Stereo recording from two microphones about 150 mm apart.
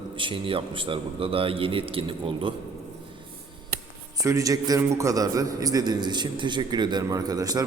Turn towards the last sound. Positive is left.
turn(degrees=-25)  # may be behind; listen again after turning